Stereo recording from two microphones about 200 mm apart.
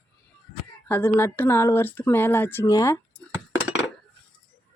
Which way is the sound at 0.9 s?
10° left (ahead or behind).